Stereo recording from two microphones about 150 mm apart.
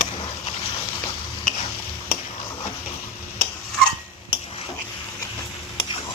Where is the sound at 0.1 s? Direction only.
40° left (ahead or behind).